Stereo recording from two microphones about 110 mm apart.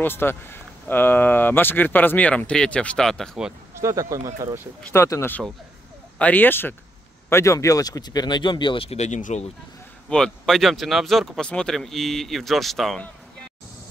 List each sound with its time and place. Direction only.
0.0 s speech: 20° left (ahead or behind); by 3.5 s centre (ahead or behind)
3.8 s speech: 30° right (ahead or behind)
4.9 s speech: 25° left (ahead or behind)
6.1 s speech: 15° left (ahead or behind); by 9.5 s 90° left
10.0 s speech: 5° left (ahead or behind)